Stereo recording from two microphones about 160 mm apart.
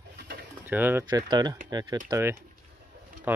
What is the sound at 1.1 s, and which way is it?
Speech, 25° right (ahead or behind).